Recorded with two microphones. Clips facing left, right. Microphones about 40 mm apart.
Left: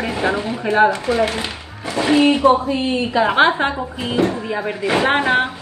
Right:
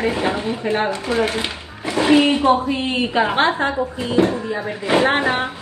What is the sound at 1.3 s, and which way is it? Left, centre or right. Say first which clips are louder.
Speech: right 1 dB; right.